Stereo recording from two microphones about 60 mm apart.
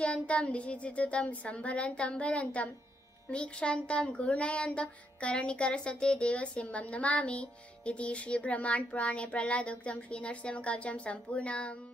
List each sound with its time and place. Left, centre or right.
0.0 s a child's voice: left